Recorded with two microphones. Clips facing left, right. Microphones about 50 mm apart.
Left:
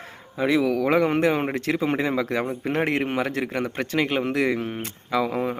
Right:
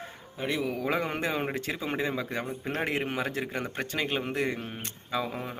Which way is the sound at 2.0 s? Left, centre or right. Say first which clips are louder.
Left 7 dB; left.